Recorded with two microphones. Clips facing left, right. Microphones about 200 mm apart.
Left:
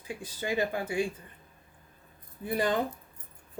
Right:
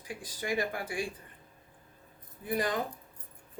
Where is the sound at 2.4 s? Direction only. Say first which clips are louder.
Left 3 dB; 30° left (ahead or behind).